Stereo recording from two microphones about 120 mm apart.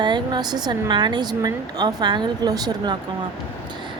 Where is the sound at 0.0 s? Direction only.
40° right (ahead or behind).